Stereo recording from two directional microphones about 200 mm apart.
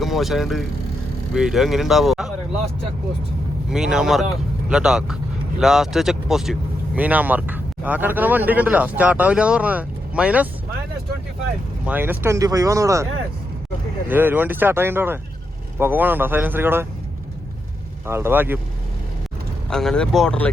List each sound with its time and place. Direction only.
0.0 s speech: centre (ahead or behind)
3.7 s speech: 5° right (ahead or behind)
11.9 s speech: 10° right (ahead or behind)
14.1 s speech: 10° right (ahead or behind)
18.0 s speech: 10° right (ahead or behind)
19.7 s speech: 5° left (ahead or behind)